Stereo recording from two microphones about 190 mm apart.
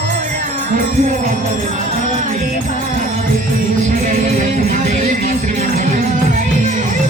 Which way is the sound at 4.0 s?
40° right (ahead or behind).